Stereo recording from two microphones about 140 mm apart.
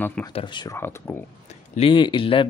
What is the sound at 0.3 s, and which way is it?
Speech, 40° left (ahead or behind).